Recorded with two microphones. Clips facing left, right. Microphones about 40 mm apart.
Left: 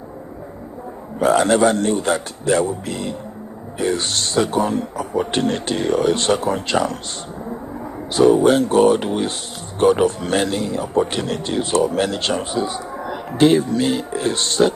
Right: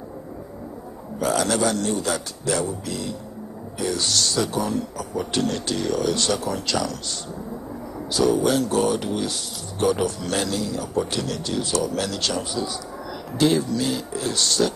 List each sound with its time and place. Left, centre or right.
1.2 s speech: left